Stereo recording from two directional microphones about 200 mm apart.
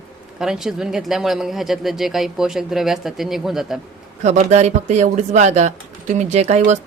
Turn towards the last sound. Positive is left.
turn(degrees=-35)  # may be behind; listen again after turning